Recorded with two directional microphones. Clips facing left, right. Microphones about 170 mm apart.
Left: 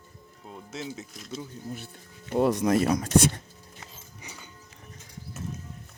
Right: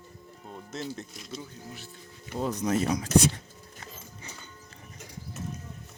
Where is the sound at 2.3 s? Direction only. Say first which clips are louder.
Left 6 dB; 70° left (ahead or behind).